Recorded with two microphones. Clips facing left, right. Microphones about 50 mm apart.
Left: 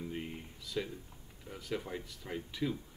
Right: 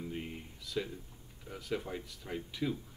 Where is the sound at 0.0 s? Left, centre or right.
Centre.